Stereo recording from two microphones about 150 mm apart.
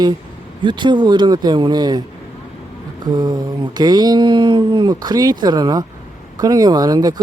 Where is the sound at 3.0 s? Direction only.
30° right (ahead or behind).